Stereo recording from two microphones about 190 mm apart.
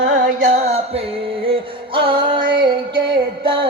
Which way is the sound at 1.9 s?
25° right (ahead or behind).